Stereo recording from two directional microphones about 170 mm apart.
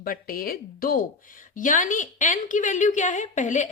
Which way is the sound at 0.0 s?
55° left (ahead or behind).